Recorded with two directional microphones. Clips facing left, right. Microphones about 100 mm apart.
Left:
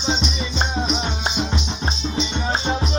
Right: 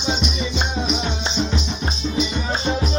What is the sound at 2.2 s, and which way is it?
Music, 30° left (ahead or behind).